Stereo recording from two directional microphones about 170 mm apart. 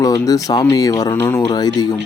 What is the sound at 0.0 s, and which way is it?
Speech, 20° left (ahead or behind).